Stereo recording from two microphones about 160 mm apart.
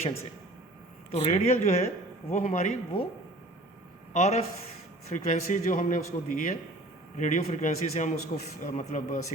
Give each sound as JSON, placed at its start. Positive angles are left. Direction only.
{"t": 1.1, "sound": "a man's voice", "side_deg": 45}
{"t": 4.1, "sound": "a man's voice", "side_deg": 45}